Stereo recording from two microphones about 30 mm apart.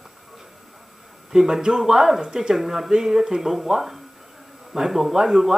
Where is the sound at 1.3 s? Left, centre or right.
Centre.